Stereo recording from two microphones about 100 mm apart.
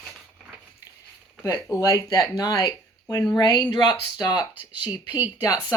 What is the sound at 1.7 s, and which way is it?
Speech, 35° left (ahead or behind).